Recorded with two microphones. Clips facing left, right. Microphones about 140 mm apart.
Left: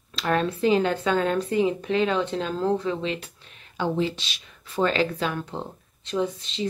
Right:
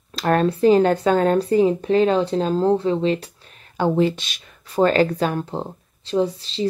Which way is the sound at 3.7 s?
50° right (ahead or behind).